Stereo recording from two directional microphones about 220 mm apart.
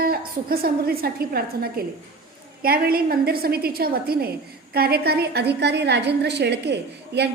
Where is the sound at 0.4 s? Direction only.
45° right (ahead or behind).